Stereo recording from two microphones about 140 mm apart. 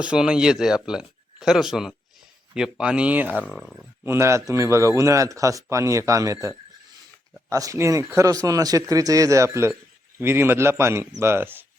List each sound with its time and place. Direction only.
0.0 s a man's voice: 5° right (ahead or behind)
3.5 s speech: centre (ahead or behind)
4.0 s a man's voice: 20° right (ahead or behind)
7.5 s a man's voice: 20° right (ahead or behind)